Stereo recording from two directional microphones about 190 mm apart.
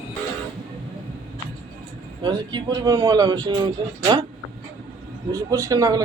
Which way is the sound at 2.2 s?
25° right (ahead or behind).